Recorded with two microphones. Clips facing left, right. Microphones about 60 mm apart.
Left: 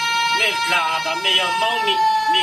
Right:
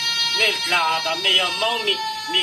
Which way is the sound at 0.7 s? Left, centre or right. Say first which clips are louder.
Left 1 dB; centre.